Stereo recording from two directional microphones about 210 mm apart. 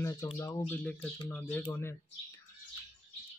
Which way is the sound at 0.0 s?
15° left (ahead or behind).